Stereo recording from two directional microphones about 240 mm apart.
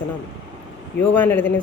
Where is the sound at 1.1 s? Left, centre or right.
Centre.